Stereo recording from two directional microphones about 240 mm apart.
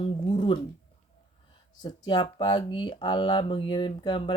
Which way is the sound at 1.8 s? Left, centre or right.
Centre.